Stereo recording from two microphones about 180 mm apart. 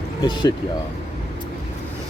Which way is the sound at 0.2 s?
20° left (ahead or behind).